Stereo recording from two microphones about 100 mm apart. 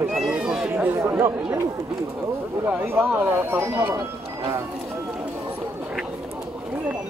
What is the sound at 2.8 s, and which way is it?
Speech, 20° right (ahead or behind).